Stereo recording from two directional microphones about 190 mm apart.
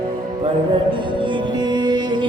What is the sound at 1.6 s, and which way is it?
Music, 20° right (ahead or behind).